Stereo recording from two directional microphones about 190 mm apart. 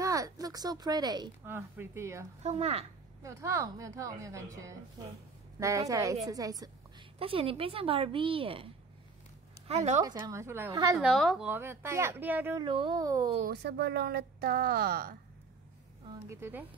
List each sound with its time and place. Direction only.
0.0 s a woman's voice: 15° right (ahead or behind)
2.4 s a woman's voice: 35° right (ahead or behind)
3.2 s a woman's voice: 15° right (ahead or behind)
7.2 s a woman's voice: 30° right (ahead or behind)
10.0 s speech: 20° right (ahead or behind)
11.0 s a woman's voice: centre (ahead or behind)
11.4 s a woman's voice: 10° right (ahead or behind)
12.6 s speech: 25° right (ahead or behind)
13.5 s a woman's voice: 60° right (ahead or behind)
16.1 s a woman's voice: 15° right (ahead or behind)